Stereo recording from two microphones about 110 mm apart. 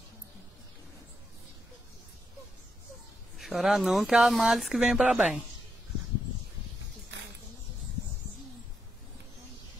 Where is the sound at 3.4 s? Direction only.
Centre (ahead or behind).